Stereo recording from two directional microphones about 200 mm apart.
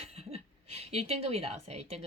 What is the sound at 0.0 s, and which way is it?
A woman's voice, 30° right (ahead or behind).